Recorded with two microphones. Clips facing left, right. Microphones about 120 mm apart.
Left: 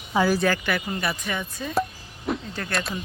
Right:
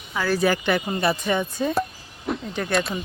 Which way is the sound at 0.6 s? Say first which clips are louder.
Right 5 dB; 25° right (ahead or behind).